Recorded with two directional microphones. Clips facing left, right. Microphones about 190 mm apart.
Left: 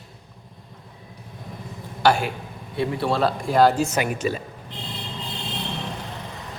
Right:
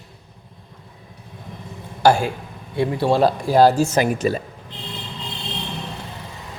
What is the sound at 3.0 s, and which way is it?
A man's voice, 40° right (ahead or behind).